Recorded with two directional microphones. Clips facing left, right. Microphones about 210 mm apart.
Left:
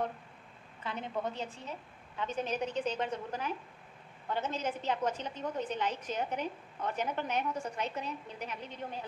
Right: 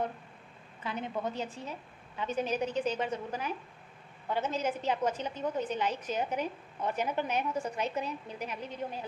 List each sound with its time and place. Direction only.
0.8 s a woman's voice: 10° right (ahead or behind)